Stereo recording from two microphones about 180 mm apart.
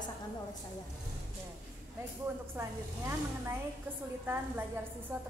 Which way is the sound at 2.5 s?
15° right (ahead or behind).